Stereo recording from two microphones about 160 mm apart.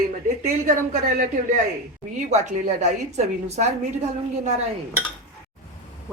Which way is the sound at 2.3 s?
45° right (ahead or behind).